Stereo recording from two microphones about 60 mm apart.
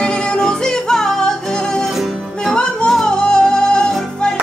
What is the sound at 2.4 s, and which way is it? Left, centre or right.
Music, centre.